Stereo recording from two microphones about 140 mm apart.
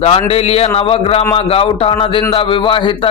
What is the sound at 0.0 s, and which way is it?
Speech, 45° left (ahead or behind).